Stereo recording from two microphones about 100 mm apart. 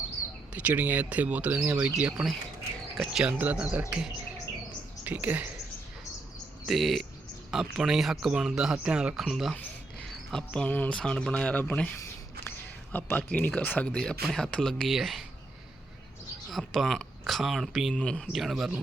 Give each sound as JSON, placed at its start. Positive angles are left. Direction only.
{"t": 0.5, "sound": "speech", "side_deg": -15}
{"t": 3.3, "sound": "speech", "side_deg": -15}
{"t": 6.7, "sound": "speech", "side_deg": 0}
{"t": 9.6, "sound": "a sound", "side_deg": 10}
{"t": 10.7, "sound": "speech", "side_deg": 15}
{"t": 12.5, "sound": "a sound", "side_deg": 20}
{"t": 13.6, "sound": "speech", "side_deg": 15}
{"t": 16.5, "sound": "speech", "side_deg": 0}
{"t": 17.9, "sound": "speech", "side_deg": 10}
{"t": 18.3, "sound": "speech", "side_deg": 0}